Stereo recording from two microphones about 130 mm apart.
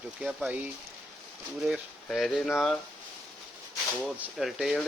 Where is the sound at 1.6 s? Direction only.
Centre (ahead or behind).